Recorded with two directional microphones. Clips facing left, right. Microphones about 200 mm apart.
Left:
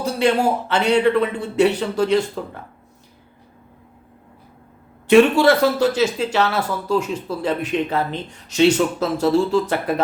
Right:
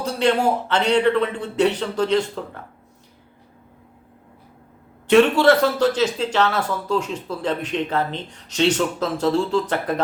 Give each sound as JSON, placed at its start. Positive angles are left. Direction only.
{"t": 0.0, "sound": "speech", "side_deg": 10}
{"t": 5.0, "sound": "speech", "side_deg": 10}